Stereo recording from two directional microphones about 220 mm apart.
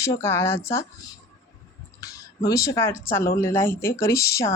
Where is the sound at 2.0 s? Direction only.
15° left (ahead or behind).